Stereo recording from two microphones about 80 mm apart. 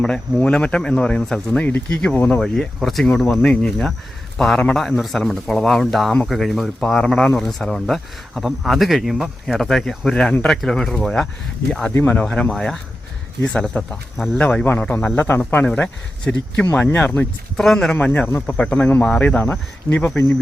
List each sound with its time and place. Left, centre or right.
0.0 s speech: centre
2.4 s speech: centre
11.9 s speech: centre
12.2 s speech: centre; by 17.2 s left
17.6 s speech: centre
17.9 s speech: left
18.5 s speech: centre